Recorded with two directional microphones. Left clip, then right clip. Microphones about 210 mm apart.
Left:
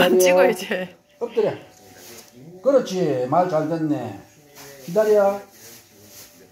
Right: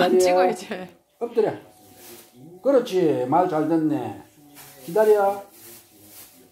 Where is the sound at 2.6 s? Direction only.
25° right (ahead or behind).